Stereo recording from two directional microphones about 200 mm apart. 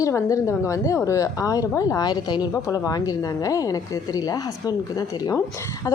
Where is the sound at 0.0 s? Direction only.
15° left (ahead or behind).